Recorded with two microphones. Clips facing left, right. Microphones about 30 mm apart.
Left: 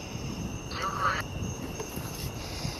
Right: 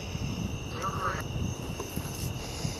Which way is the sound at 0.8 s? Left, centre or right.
Left.